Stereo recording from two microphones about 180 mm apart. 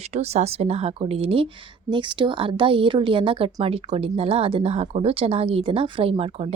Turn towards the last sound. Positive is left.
turn(degrees=-30)  # may be behind; listen again after turning